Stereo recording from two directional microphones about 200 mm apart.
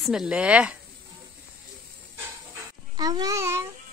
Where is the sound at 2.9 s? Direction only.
20° right (ahead or behind).